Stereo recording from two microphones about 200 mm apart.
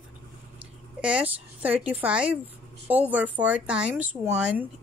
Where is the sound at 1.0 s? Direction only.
5° right (ahead or behind).